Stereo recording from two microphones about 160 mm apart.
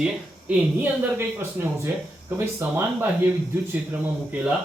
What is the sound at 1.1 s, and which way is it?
Speech, 15° right (ahead or behind).